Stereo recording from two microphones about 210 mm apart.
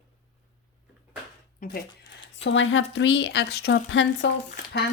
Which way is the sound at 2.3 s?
60° left (ahead or behind).